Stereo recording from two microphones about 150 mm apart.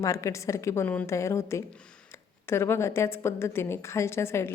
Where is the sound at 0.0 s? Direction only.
20° left (ahead or behind).